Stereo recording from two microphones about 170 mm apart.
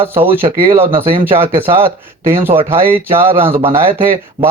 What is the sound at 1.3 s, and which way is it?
A man's voice, 15° right (ahead or behind).